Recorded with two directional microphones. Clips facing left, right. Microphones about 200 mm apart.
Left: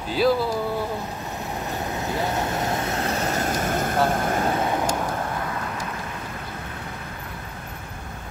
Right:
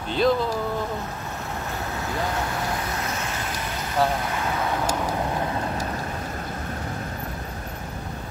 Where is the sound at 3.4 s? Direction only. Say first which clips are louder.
Left 7 dB; 45° left (ahead or behind).